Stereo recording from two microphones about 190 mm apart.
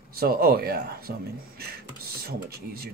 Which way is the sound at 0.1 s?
55° right (ahead or behind).